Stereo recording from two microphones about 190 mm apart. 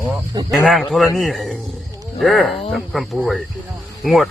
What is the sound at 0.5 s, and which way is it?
Speech, centre (ahead or behind).